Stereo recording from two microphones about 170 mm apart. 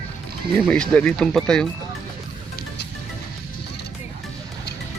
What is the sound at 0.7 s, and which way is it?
Speech, 5° left (ahead or behind).